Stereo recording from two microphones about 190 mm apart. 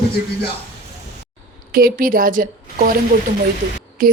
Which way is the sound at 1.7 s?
50° right (ahead or behind).